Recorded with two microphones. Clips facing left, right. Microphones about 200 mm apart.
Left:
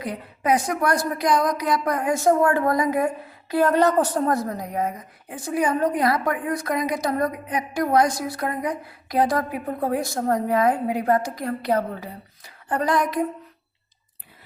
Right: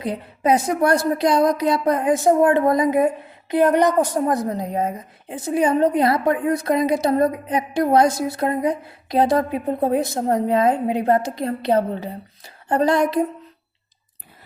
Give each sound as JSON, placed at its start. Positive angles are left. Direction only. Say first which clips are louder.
{"t": 0.0, "sound": "a woman's voice", "louder": "right 5 dB", "side_deg": -25}